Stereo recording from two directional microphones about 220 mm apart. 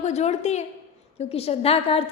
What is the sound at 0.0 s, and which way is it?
Speech, 30° left (ahead or behind).